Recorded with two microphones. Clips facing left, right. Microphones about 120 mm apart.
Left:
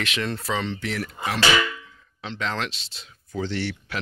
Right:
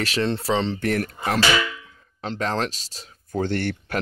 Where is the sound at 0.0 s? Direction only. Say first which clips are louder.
Right 5 dB; 35° right (ahead or behind).